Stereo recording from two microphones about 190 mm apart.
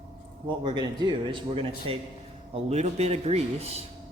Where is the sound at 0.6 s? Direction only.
25° right (ahead or behind).